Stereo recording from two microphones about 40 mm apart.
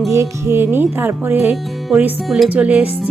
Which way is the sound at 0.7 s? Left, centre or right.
Right.